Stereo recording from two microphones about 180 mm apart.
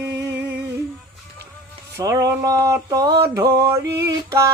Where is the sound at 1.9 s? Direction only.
20° right (ahead or behind).